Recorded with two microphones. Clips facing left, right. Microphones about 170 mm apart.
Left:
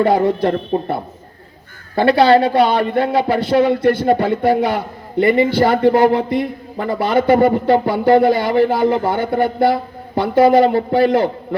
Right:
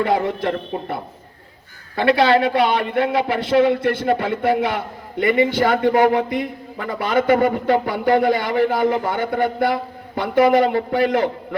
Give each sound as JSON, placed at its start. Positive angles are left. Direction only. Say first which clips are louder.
{"t": 0.0, "sound": "speech", "louder": "left 5 dB", "side_deg": 35}
{"t": 2.0, "sound": "speech", "louder": "left 4 dB", "side_deg": 30}